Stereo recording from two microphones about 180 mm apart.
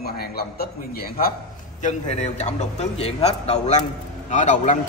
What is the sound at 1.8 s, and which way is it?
A man's voice, 40° left (ahead or behind).